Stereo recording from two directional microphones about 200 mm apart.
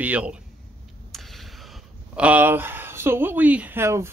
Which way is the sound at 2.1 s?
5° right (ahead or behind).